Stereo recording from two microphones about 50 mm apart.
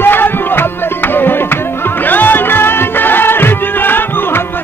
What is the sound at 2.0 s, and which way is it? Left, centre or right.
Music, left.